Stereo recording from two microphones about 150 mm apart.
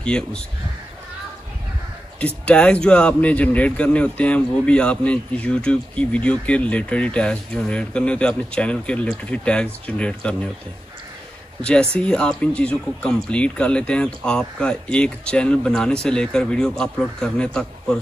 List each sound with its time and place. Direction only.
0.0 s a man's voice: 5° left (ahead or behind)
2.1 s a man's voice: 10° left (ahead or behind)
11.6 s a man's voice: 5° left (ahead or behind)